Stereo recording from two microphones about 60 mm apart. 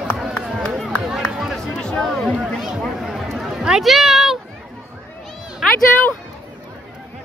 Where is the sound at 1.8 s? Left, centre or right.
Centre.